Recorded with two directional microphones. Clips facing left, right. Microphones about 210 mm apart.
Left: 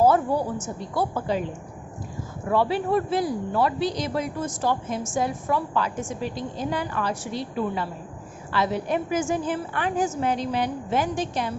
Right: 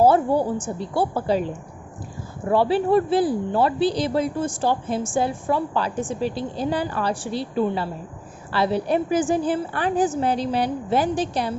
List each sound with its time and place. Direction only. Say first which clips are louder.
0.0 s a woman's voice: right 3 dB; 30° right (ahead or behind)
2.5 s speech: right 4 dB; 30° right (ahead or behind)